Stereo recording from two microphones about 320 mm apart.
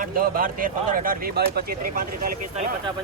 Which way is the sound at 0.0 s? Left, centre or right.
Right.